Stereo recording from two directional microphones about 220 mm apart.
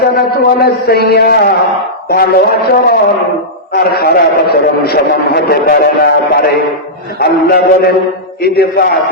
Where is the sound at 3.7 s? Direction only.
45° left (ahead or behind).